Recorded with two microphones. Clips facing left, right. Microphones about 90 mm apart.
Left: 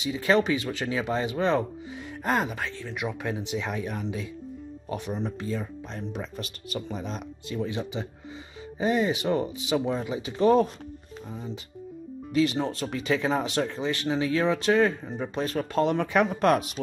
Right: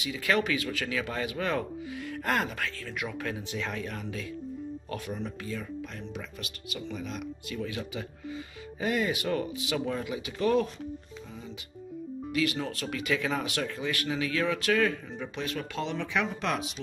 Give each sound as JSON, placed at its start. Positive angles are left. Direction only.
{"t": 0.0, "sound": "speech", "side_deg": 25}